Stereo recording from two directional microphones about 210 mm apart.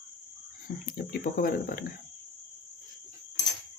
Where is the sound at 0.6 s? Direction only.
45° left (ahead or behind).